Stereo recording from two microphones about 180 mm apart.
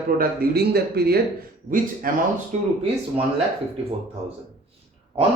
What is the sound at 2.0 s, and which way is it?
Speech, 50° right (ahead or behind).